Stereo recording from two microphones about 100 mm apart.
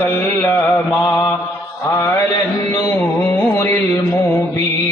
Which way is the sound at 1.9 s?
25° left (ahead or behind).